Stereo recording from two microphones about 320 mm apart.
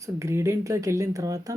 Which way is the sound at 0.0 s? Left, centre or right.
Centre.